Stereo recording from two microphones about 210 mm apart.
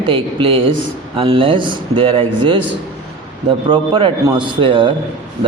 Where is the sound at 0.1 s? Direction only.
25° right (ahead or behind).